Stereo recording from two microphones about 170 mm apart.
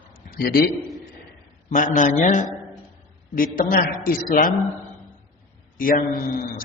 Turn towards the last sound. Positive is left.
turn(degrees=55)  # may be behind; listen again after turning